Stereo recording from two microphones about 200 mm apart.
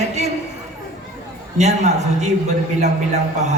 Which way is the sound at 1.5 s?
35° right (ahead or behind).